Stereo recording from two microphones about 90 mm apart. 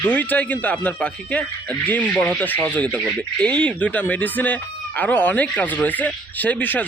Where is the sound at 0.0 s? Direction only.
20° left (ahead or behind).